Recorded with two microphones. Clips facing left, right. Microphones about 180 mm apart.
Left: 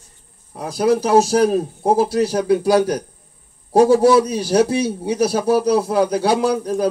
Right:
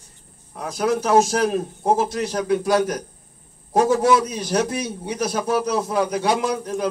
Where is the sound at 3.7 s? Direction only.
35° left (ahead or behind).